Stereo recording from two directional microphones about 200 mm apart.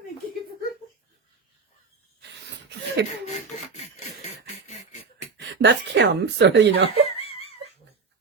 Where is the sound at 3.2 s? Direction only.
35° left (ahead or behind).